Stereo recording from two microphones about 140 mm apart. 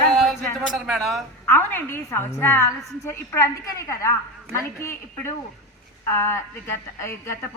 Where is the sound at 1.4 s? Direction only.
15° left (ahead or behind).